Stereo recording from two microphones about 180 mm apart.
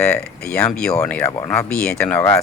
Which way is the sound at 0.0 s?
5° left (ahead or behind).